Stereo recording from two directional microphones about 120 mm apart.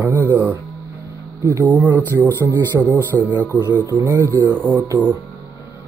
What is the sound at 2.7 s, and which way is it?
Speech, 5° right (ahead or behind).